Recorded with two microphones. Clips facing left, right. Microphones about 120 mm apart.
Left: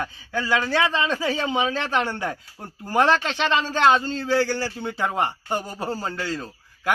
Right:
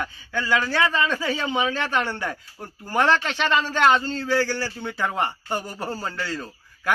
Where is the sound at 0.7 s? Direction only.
25° left (ahead or behind).